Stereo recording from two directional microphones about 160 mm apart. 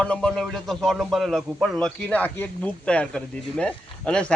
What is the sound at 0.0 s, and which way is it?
Speech, 5° left (ahead or behind).